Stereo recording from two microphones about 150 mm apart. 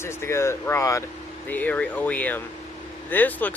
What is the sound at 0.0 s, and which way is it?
Speech, 15° left (ahead or behind).